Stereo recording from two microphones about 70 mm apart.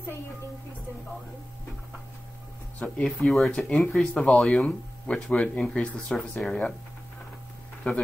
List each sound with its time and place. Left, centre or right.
3.0 s speech: centre
4.5 s speech: centre
7.8 s speech: centre